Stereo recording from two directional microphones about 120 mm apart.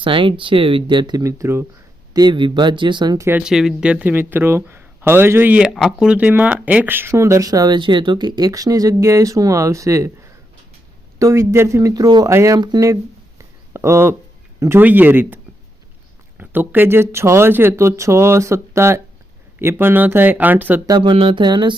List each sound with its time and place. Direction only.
0.0 s speech: 45° right (ahead or behind)
1.2 s speech: 25° right (ahead or behind)
2.1 s speech: 40° right (ahead or behind)
3.4 s speech: 5° right (ahead or behind); by 10.1 s 25° right (ahead or behind)
11.2 s speech: 25° right (ahead or behind)
12.5 s speech: 35° right (ahead or behind)
13.4 s a sound: 20° right (ahead or behind)
14.6 s speech: 20° right (ahead or behind)
16.4 s speech: 15° right (ahead or behind)
20.8 s speech: 40° right (ahead or behind)